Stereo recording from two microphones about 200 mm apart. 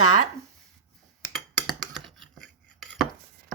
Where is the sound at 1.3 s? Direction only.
Centre (ahead or behind).